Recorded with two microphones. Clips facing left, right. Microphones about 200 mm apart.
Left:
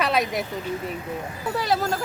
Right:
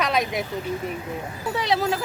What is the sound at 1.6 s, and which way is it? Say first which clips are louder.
Speech: right 1 dB; centre (ahead or behind).